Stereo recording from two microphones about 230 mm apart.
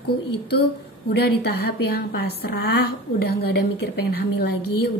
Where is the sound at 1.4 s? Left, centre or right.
Left.